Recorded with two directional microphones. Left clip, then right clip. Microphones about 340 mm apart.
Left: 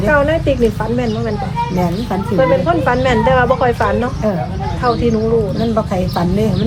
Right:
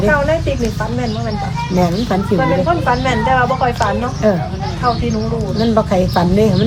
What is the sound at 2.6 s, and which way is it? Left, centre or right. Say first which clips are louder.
Speech: left 1 dB; left.